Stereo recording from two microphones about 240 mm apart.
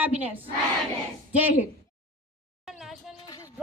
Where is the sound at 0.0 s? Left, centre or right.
Centre.